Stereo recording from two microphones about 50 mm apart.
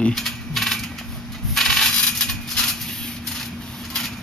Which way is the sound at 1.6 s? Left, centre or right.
Centre.